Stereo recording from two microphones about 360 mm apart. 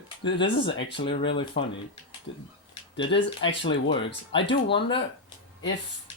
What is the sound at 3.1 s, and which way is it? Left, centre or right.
Speech, left.